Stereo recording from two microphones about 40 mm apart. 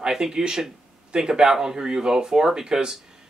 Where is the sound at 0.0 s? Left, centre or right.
Centre.